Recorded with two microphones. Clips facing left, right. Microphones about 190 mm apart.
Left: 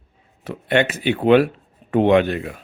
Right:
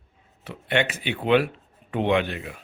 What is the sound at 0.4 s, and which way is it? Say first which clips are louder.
Speech: left 6 dB; 45° left (ahead or behind).